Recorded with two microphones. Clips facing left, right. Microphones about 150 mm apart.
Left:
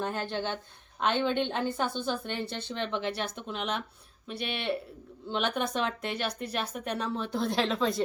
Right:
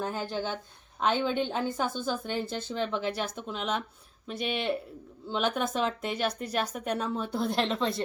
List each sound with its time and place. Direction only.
0.0 s speech: 5° right (ahead or behind)
4.3 s speech: 45° right (ahead or behind)
5.3 s speech: 5° right (ahead or behind)